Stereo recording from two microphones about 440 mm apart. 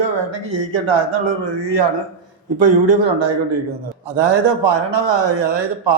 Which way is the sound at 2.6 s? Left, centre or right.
Right.